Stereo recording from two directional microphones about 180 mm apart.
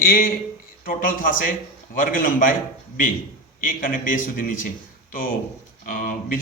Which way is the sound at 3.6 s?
50° left (ahead or behind).